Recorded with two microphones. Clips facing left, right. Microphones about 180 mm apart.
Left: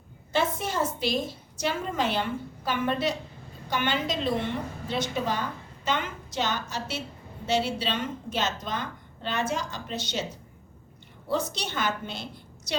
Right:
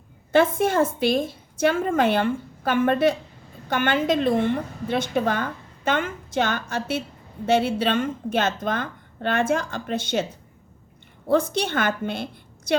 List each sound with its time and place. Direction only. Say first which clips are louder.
0.3 s a woman's voice: right 8 dB; 55° right (ahead or behind)
11.3 s a woman's voice: right 8 dB; 55° right (ahead or behind)